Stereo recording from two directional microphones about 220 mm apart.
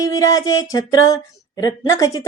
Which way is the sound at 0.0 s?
15° left (ahead or behind).